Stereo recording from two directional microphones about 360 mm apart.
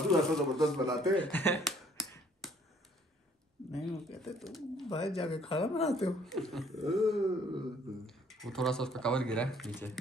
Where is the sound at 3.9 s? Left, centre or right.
Centre.